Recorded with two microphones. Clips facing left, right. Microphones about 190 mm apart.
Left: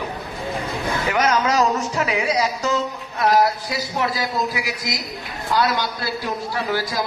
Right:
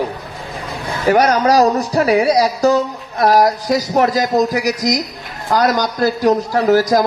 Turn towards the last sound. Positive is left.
turn(degrees=-45)  # may be behind; listen again after turning